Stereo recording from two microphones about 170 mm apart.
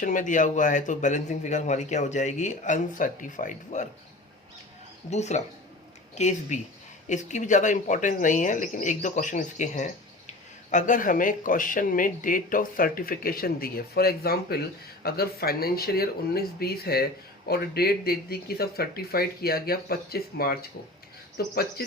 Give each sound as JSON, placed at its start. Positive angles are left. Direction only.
{"t": 0.0, "sound": "speech", "side_deg": 50}
{"t": 5.1, "sound": "speech", "side_deg": 40}